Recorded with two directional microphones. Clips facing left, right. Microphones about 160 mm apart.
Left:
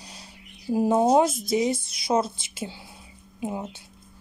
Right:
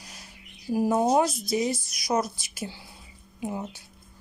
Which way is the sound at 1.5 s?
25° left (ahead or behind).